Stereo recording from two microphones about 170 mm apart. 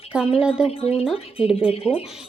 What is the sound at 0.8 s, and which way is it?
Speech, 35° left (ahead or behind).